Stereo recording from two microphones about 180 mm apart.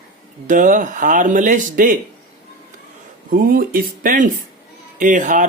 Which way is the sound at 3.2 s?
50° right (ahead or behind).